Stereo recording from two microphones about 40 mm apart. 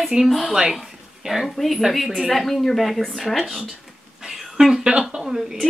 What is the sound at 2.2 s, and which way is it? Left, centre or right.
A woman's voice, centre.